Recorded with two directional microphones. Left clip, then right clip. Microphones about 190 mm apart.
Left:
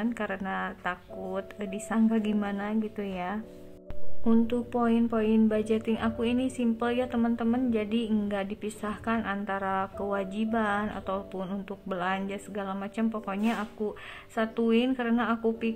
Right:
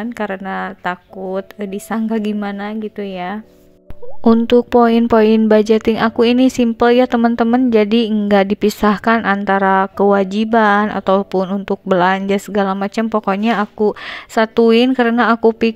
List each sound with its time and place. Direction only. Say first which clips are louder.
0.0 s a woman's voice: right 10 dB; 35° right (ahead or behind)
4.2 s speech: right 16 dB; 50° right (ahead or behind)